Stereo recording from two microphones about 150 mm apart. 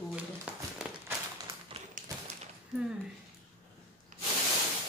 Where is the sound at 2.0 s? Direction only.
65° right (ahead or behind).